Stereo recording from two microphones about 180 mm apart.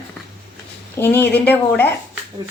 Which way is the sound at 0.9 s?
10° left (ahead or behind).